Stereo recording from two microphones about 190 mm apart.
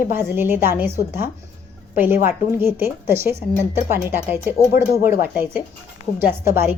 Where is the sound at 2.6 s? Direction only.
10° right (ahead or behind).